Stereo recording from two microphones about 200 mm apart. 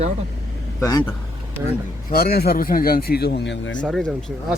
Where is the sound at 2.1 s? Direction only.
50° left (ahead or behind); by 3.8 s 65° left (ahead or behind).